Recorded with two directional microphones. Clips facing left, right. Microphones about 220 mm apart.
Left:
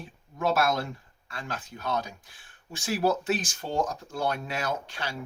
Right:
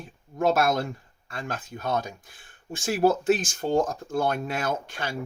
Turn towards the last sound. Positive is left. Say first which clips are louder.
# right 3 dB
turn(degrees=-50)  # may be behind; listen again after turning